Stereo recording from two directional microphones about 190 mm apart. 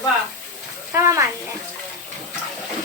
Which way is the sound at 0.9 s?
15° right (ahead or behind).